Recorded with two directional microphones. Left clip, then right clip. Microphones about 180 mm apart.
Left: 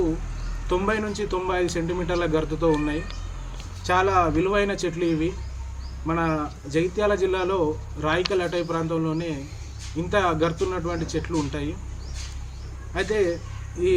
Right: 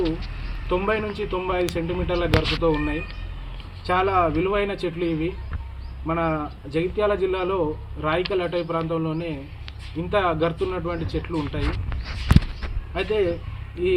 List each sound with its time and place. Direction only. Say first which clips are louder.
0.7 s a man's voice: right 1 dB; 15° left (ahead or behind)
12.9 s speech: even; 15° left (ahead or behind)